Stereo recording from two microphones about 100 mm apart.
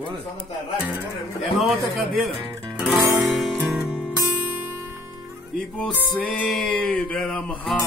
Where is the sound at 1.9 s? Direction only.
Centre (ahead or behind).